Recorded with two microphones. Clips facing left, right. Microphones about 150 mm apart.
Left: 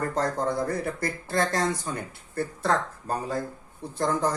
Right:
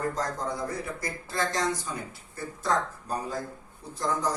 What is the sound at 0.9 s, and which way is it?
Speech, 60° left (ahead or behind).